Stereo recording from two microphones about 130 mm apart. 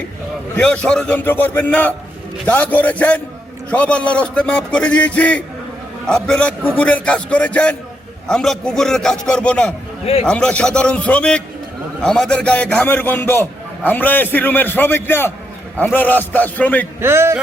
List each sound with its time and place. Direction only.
0.5 s a man's voice: 10° left (ahead or behind)
17.0 s speech: 20° right (ahead or behind)